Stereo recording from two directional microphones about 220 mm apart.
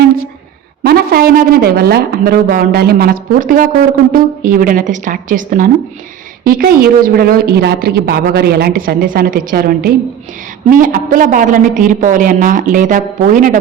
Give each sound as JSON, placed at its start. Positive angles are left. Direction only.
{"t": 0.9, "sound": "a woman's voice", "side_deg": -45}